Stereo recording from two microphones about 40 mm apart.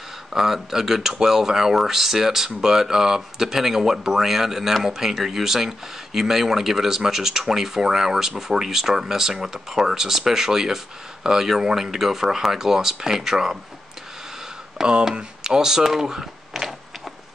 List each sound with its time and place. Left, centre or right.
0.3 s speech: centre
14.8 s speech: centre